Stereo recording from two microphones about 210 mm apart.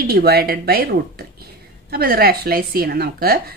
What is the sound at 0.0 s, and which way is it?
Speech, 45° right (ahead or behind).